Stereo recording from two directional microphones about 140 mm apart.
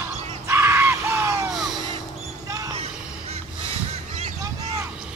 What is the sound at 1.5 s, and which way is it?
Music, centre (ahead or behind).